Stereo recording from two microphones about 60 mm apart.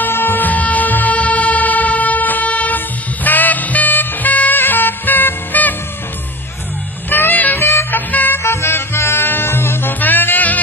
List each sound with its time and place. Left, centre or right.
0.0 s music: left
7.1 s music: left
8.4 s music: left